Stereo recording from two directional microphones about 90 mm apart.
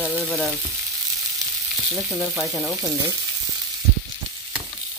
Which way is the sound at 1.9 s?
10° right (ahead or behind).